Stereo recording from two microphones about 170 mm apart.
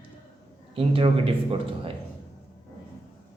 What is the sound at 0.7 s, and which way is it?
Speech, 30° right (ahead or behind).